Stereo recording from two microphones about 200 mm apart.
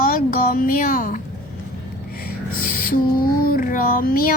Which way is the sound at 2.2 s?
45° left (ahead or behind).